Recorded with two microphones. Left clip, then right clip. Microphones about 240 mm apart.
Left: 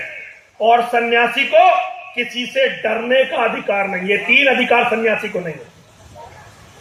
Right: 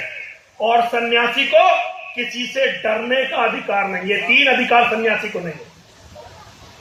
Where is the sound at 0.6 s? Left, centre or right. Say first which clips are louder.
Left 3 dB; left.